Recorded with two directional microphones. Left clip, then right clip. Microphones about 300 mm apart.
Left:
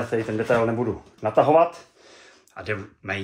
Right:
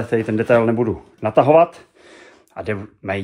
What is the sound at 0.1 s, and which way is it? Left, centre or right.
Speech, right.